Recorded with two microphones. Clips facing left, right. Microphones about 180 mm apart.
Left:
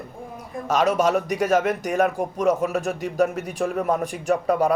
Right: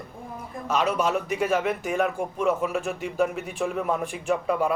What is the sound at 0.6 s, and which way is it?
Speech, 45° left (ahead or behind).